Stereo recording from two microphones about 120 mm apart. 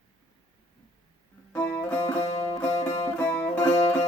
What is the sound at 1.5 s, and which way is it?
Music, 15° left (ahead or behind).